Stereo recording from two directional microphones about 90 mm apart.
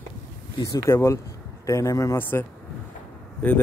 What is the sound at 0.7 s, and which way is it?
A man's voice, 30° left (ahead or behind).